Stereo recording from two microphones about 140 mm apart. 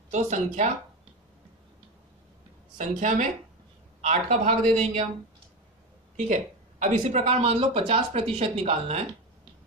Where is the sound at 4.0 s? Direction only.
50° right (ahead or behind).